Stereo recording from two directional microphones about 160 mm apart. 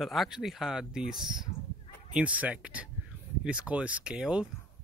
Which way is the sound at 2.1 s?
10° right (ahead or behind).